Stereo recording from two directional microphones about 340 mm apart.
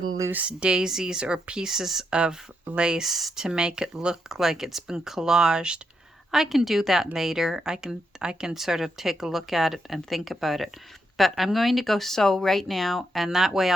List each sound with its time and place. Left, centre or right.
0.2 s speech: centre